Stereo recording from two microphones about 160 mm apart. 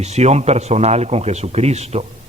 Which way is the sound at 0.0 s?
45° right (ahead or behind).